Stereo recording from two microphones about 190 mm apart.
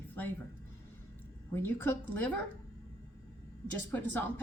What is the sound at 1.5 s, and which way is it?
Speech, 10° left (ahead or behind).